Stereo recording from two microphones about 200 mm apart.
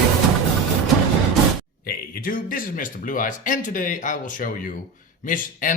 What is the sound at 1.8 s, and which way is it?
Speech, 50° left (ahead or behind).